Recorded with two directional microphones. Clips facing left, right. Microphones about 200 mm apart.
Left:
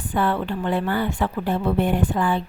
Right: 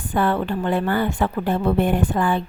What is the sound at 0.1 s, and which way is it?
A woman's voice, 45° right (ahead or behind).